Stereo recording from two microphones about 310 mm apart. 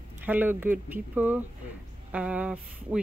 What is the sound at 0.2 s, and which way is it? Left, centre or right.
A woman's voice, centre.